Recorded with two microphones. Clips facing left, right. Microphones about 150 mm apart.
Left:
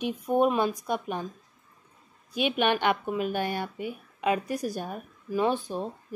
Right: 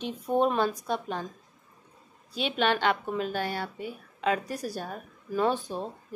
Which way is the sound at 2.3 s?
15° left (ahead or behind).